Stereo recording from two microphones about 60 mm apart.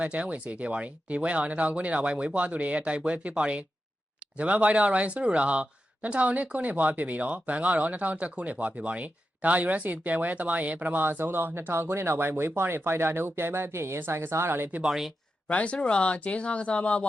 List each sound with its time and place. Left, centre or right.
0.0 s speech: right
14.8 s speech: centre
15.4 s speech: left